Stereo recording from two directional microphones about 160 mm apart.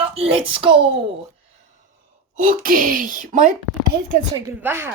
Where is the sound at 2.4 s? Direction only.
60° right (ahead or behind).